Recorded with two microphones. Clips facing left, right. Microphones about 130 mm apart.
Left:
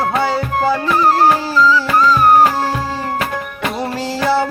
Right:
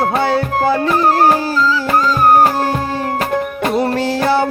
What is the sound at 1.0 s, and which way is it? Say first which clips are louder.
Music: left 1 dB; 45° right (ahead or behind).